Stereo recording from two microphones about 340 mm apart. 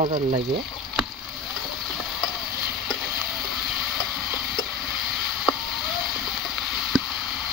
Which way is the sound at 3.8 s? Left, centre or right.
Centre.